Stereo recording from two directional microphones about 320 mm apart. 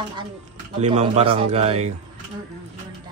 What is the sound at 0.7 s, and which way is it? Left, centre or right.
Speech, centre.